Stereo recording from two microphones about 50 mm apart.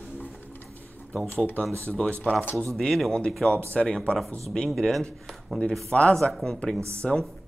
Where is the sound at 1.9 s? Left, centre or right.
Centre.